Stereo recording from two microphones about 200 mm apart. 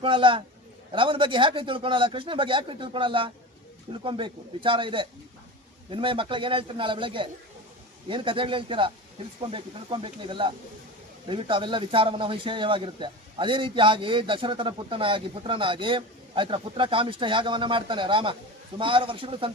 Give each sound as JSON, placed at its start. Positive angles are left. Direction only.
{"t": 0.0, "sound": "speech", "side_deg": -25}